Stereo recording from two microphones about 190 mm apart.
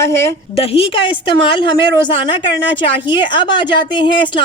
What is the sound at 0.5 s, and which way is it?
A woman's voice, 30° left (ahead or behind).